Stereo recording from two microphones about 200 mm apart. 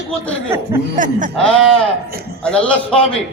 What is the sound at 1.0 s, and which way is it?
Speech, 40° right (ahead or behind).